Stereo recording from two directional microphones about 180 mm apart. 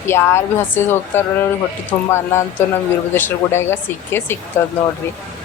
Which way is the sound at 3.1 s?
10° left (ahead or behind).